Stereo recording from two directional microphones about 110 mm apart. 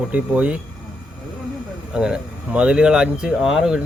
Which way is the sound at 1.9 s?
10° right (ahead or behind).